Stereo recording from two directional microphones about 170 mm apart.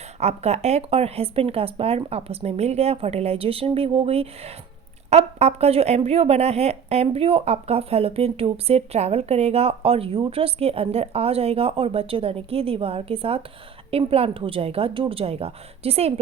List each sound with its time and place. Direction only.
0.2 s speech: 40° right (ahead or behind)